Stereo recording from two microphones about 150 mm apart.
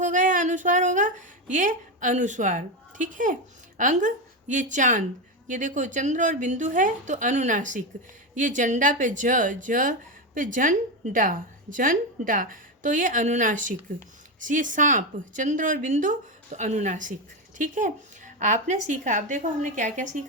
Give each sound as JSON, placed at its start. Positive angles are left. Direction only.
{"t": 0.0, "sound": "a woman's voice", "side_deg": -60}